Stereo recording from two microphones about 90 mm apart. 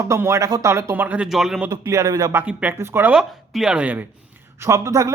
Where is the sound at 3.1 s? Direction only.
5° right (ahead or behind).